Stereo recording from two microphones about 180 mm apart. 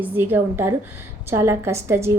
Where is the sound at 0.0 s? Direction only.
10° right (ahead or behind).